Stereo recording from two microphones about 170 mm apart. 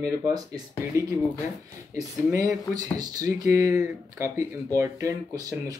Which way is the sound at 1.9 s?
20° right (ahead or behind).